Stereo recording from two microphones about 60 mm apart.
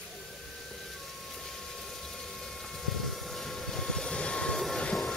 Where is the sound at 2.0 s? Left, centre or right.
Centre.